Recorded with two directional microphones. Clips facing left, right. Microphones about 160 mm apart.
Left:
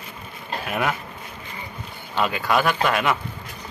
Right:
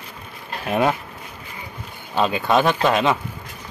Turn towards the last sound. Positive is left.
turn(degrees=-20)  # may be behind; listen again after turning